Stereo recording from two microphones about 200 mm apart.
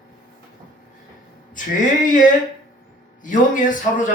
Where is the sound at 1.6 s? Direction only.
40° left (ahead or behind).